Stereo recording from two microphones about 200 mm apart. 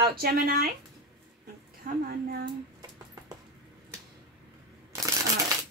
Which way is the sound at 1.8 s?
45° right (ahead or behind).